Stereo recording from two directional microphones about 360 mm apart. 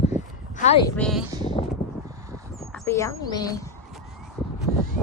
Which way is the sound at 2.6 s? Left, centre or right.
Centre.